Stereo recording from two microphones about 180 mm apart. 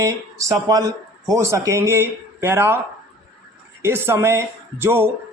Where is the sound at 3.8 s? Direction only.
15° right (ahead or behind).